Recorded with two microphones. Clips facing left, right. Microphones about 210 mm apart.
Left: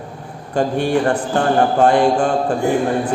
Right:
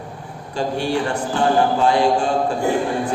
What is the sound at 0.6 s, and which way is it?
A man's voice, 55° left (ahead or behind).